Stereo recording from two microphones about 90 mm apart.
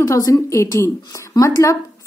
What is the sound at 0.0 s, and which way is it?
A woman's voice, 40° left (ahead or behind).